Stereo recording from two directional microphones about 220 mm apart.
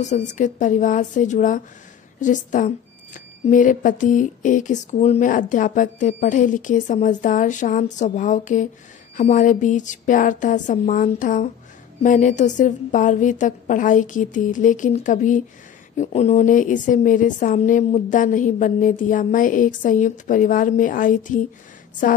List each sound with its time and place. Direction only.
0.0 s a woman's voice: 35° left (ahead or behind)